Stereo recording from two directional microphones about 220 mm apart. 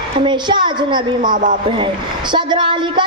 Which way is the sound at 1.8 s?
20° right (ahead or behind).